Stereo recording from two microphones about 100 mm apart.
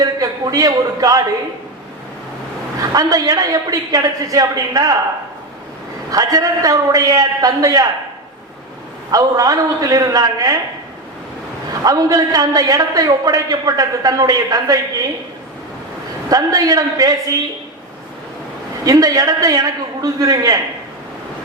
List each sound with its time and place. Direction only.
0.0 s a man's voice: 40° right (ahead or behind)
2.9 s a man's voice: 35° right (ahead or behind)
6.1 s a man's voice: 35° right (ahead or behind)
9.1 s a man's voice: 40° right (ahead or behind)
11.8 s a man's voice: 35° right (ahead or behind)
16.3 s a man's voice: 40° right (ahead or behind)
18.9 s a man's voice: 35° right (ahead or behind)